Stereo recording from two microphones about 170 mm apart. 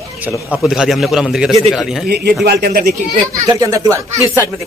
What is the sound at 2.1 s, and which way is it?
Speech, 70° right (ahead or behind).